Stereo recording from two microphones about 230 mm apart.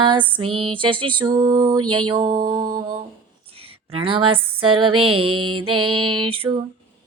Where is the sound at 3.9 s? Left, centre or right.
Right.